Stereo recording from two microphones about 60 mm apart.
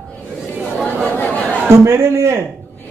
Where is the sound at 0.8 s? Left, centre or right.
Left.